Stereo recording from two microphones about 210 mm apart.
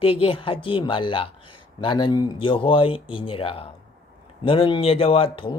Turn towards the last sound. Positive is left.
turn(degrees=25)  # may be behind; listen again after turning